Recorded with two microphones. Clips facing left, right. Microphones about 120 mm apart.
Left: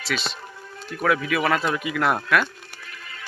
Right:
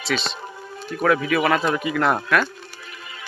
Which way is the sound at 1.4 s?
10° right (ahead or behind).